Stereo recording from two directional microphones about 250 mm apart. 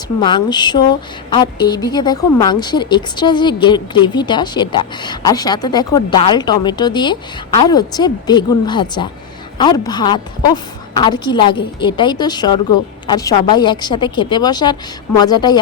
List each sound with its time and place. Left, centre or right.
0.2 s a woman's voice: centre